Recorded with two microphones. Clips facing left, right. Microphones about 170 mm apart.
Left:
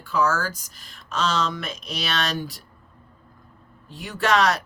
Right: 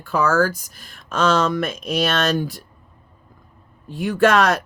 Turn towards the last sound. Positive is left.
turn(degrees=-55)  # may be behind; listen again after turning